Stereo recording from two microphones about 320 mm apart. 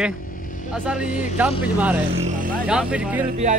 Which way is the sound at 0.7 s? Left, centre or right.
Centre.